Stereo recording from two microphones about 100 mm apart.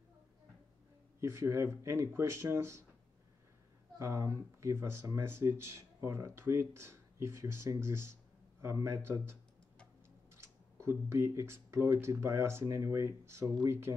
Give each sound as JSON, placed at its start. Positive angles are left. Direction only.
{"t": 1.2, "sound": "speech", "side_deg": -25}
{"t": 4.0, "sound": "speech", "side_deg": -30}
{"t": 7.8, "sound": "a sound", "side_deg": -25}
{"t": 8.8, "sound": "speech", "side_deg": -25}